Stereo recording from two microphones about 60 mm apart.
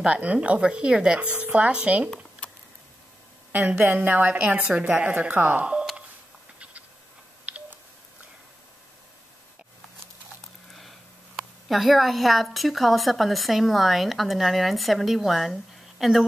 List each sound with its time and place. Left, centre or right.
0.0 s a woman's voice: right
3.5 s speech: right
7.5 s telephone dialing: right
10.4 s a sound: centre
11.7 s a woman's voice: centre